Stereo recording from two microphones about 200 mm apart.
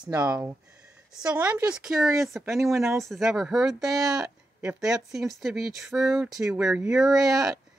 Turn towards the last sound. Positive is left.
turn(degrees=0)  # may be behind; listen again after turning